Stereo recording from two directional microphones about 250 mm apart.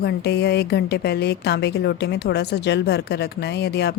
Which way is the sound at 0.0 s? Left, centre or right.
Left.